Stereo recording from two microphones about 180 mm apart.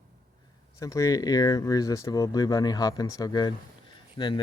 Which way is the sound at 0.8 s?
20° left (ahead or behind).